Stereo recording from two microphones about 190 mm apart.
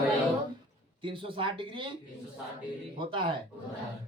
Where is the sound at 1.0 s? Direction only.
25° right (ahead or behind).